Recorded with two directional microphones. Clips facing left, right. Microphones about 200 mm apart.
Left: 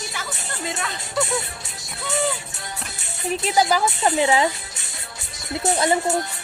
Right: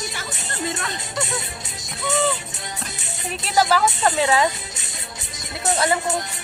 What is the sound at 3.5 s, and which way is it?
Speech, 10° left (ahead or behind).